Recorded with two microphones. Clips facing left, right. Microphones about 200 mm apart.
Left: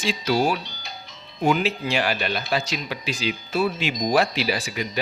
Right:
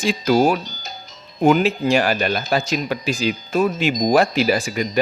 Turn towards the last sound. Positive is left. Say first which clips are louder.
# right 7 dB
turn(degrees=-45)  # may be behind; listen again after turning